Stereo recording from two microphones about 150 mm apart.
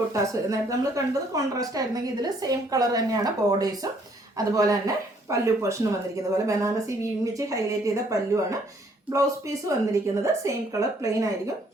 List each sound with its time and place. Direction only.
0.1 s a woman's voice: 20° right (ahead or behind)